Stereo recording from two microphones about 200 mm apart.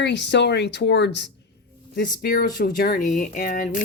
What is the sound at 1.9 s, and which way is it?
A woman's voice, 50° left (ahead or behind).